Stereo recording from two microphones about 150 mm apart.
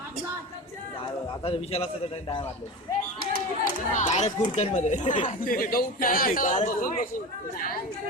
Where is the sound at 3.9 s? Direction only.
50° left (ahead or behind).